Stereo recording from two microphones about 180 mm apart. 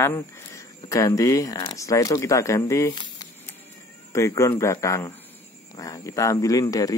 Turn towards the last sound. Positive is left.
turn(degrees=20)  # may be behind; listen again after turning